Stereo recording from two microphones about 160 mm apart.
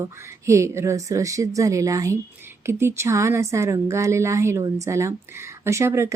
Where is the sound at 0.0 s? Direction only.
15° right (ahead or behind).